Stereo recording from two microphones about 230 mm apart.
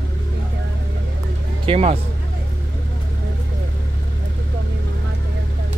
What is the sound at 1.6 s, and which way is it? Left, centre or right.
Speech, right.